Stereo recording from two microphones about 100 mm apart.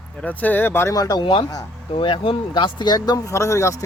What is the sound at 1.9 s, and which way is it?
Speech, 60° left (ahead or behind).